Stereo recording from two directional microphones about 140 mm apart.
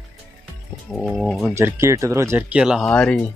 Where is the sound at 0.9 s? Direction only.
Centre (ahead or behind).